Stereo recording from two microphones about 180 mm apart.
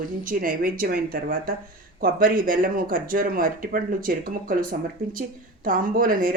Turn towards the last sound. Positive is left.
turn(degrees=-50)  # may be behind; listen again after turning